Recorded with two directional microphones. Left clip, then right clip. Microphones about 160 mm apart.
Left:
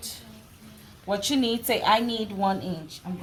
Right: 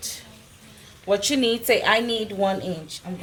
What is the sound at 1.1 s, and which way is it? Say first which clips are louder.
A woman's voice: right 5 dB; 35° right (ahead or behind).